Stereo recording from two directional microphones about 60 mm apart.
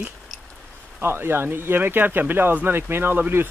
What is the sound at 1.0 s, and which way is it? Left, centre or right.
Speech, right.